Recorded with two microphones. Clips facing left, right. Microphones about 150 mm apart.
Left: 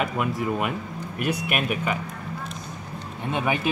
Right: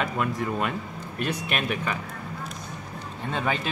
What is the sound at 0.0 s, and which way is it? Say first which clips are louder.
Speech: left 2 dB; 10° left (ahead or behind).